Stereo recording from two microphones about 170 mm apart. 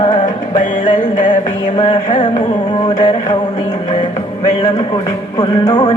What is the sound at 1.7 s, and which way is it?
Music, 30° left (ahead or behind).